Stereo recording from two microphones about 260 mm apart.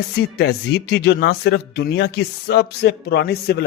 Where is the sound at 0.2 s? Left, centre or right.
Left.